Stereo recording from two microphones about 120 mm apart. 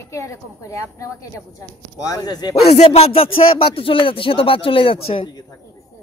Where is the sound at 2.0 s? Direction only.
35° left (ahead or behind).